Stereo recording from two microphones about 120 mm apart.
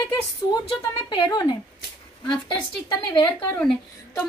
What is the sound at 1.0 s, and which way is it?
Speech, 35° left (ahead or behind).